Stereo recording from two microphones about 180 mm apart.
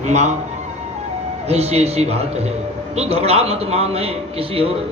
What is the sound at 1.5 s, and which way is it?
A man's voice, 35° right (ahead or behind).